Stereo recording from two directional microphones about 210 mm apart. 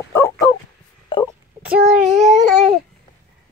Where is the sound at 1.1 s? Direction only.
25° left (ahead or behind).